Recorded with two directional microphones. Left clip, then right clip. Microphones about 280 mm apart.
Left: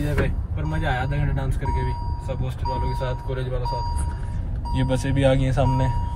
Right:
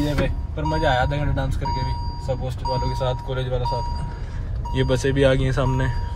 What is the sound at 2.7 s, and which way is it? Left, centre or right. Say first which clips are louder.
Speech: right 4 dB; right.